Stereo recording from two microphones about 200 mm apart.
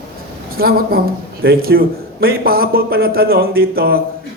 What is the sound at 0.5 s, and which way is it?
A woman's voice, 50° right (ahead or behind).